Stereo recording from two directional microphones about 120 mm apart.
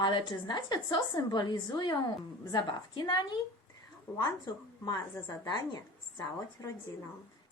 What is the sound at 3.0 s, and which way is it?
Speech, 40° left (ahead or behind).